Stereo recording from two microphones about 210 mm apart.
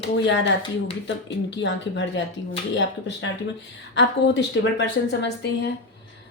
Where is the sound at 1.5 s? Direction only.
60° left (ahead or behind).